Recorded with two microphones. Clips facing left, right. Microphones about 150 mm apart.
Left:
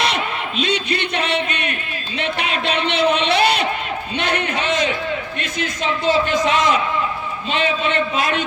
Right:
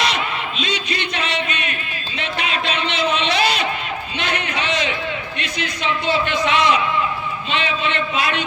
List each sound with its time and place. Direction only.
0.1 s music: 55° left (ahead or behind)
2.1 s a sound: 55° left (ahead or behind)
5.4 s a man's voice: 45° left (ahead or behind)